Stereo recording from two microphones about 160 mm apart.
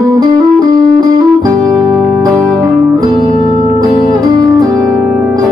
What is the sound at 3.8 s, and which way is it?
Music, 25° right (ahead or behind).